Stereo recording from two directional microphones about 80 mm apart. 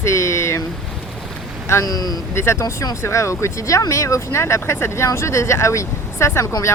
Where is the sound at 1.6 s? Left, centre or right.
Left.